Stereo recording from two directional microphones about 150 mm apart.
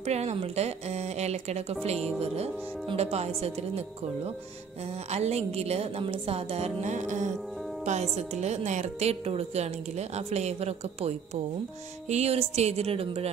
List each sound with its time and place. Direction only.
0.0 s a woman's voice: 45° right (ahead or behind)